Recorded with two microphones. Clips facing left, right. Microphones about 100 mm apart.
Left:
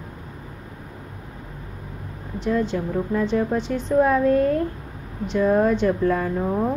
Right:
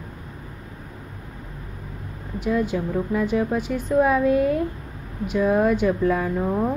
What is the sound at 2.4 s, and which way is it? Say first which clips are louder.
Speech: even; 10° right (ahead or behind).